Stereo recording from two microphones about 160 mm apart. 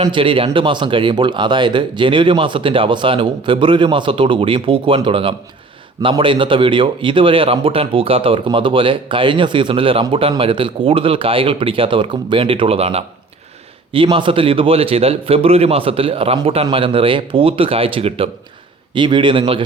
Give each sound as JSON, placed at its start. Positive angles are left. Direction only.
{"t": 0.0, "sound": "a man's voice", "side_deg": -30}